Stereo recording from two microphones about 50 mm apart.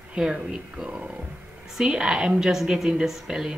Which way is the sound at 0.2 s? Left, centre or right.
Centre.